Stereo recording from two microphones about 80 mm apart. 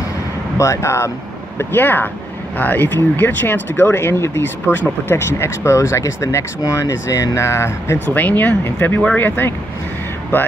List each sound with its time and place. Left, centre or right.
0.6 s speech: left
1.6 s speech: left
8.1 s speech: left